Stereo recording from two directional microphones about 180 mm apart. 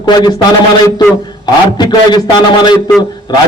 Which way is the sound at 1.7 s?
25° left (ahead or behind).